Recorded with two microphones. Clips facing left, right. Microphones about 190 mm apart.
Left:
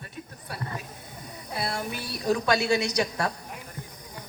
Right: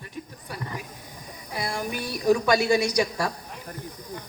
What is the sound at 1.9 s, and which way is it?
A man's voice, 25° left (ahead or behind).